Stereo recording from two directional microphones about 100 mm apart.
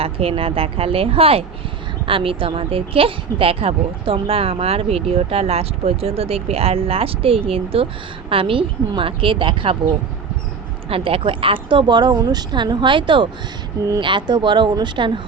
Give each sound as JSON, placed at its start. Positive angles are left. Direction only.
{"t": 0.0, "sound": "a woman's voice", "side_deg": -70}
{"t": 10.8, "sound": "speech", "side_deg": -70}